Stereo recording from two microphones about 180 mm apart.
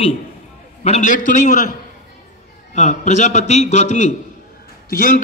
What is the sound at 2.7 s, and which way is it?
A man's voice, 40° left (ahead or behind).